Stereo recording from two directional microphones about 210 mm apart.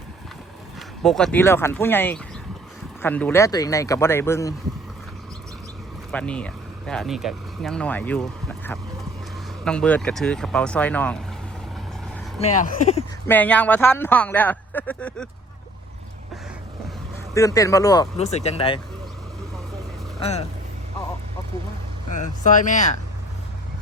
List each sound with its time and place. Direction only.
1.0 s speech: centre (ahead or behind)
6.1 s speech: 5° left (ahead or behind)
12.4 s speech: 35° left (ahead or behind)
13.2 s speech: 10° left (ahead or behind)
17.3 s speech: 15° left (ahead or behind)
18.2 s speech: 30° left (ahead or behind)
20.1 s speech: 30° left (ahead or behind)
22.1 s speech: 35° left (ahead or behind)